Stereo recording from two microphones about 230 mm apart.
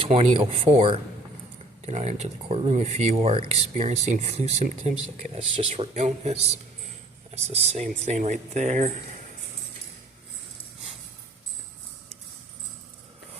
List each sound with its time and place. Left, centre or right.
0.0 s speech: right